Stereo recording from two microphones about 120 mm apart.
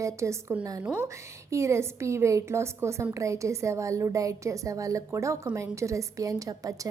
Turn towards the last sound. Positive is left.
turn(degrees=-30)  # may be behind; listen again after turning